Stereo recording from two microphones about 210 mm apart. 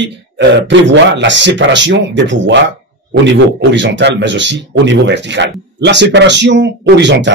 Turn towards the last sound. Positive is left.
turn(degrees=-55)  # may be behind; listen again after turning